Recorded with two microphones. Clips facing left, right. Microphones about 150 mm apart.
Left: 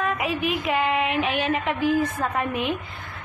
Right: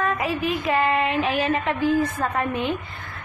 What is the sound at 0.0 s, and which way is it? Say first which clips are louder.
A woman's voice: right 1 dB; centre (ahead or behind).